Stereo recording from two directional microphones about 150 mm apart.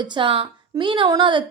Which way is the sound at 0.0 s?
30° right (ahead or behind).